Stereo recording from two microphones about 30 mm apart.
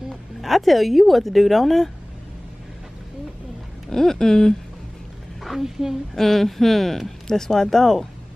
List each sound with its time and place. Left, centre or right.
0.4 s speech: centre
3.9 s speech: centre
5.4 s a woman's voice: centre
6.1 s speech: centre